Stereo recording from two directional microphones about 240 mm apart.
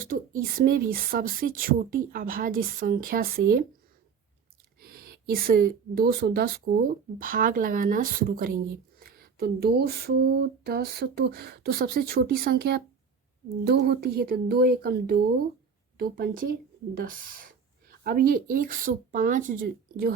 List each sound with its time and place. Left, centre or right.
0.5 s speech: right
4.8 s speech: right